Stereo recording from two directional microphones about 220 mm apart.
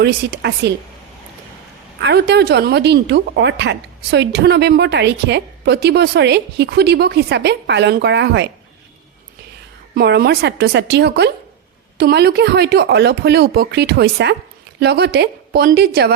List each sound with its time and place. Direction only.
0.0 s speech: 50° right (ahead or behind)
2.0 s speech: 50° right (ahead or behind)
9.9 s speech: 45° right (ahead or behind)